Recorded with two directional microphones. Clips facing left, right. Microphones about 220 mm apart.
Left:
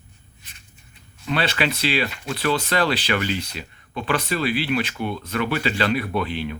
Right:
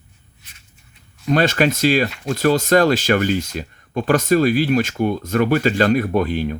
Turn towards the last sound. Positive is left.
turn(degrees=-45)  # may be behind; listen again after turning